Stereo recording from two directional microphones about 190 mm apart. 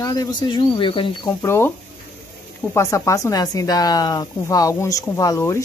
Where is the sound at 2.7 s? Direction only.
15° left (ahead or behind).